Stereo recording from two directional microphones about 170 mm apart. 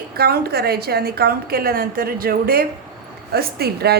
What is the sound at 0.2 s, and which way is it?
A woman's voice, 65° right (ahead or behind).